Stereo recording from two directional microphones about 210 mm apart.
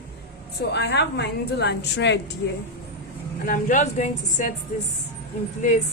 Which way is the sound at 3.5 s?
35° left (ahead or behind).